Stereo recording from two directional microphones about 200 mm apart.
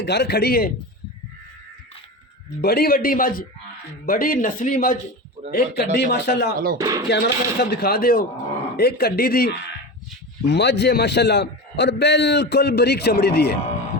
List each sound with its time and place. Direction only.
0.0 s speech: 55° left (ahead or behind)
2.6 s speech: 50° left (ahead or behind)
5.5 s speech: 50° left (ahead or behind)
6.7 s speech: 15° right (ahead or behind)
7.1 s a man's voice: 55° left (ahead or behind)